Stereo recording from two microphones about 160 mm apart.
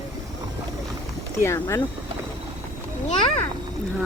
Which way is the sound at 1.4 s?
15° left (ahead or behind).